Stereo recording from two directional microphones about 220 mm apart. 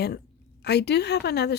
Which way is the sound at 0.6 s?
50° left (ahead or behind).